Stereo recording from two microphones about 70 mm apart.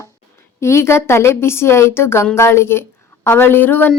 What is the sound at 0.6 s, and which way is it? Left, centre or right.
A woman's voice, left.